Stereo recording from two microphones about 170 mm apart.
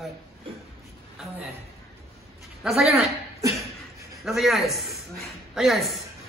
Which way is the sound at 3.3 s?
15° right (ahead or behind).